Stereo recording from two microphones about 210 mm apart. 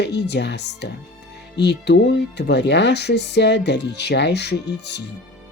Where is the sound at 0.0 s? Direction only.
55° left (ahead or behind).